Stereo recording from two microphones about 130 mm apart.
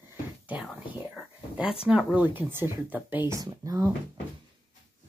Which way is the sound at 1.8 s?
10° right (ahead or behind).